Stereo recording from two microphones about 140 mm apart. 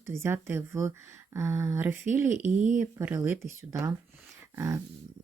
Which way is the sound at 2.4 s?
60° right (ahead or behind).